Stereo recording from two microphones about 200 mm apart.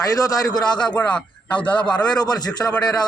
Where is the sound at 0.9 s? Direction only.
5° left (ahead or behind).